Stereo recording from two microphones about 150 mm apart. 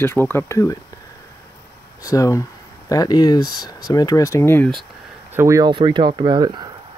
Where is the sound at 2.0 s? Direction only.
20° left (ahead or behind).